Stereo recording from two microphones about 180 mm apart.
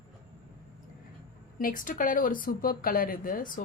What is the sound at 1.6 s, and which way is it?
Speech, 50° left (ahead or behind).